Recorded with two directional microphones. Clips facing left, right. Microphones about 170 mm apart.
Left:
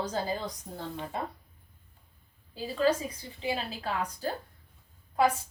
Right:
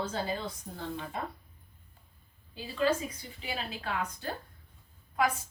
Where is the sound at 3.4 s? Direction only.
30° left (ahead or behind).